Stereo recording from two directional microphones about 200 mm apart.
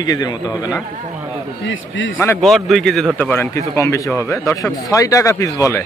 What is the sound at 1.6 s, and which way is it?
Speech, 70° left (ahead or behind).